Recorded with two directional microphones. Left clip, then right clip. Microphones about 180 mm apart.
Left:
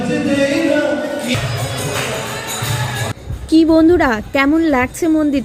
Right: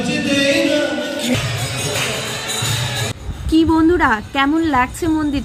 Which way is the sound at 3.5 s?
15° left (ahead or behind).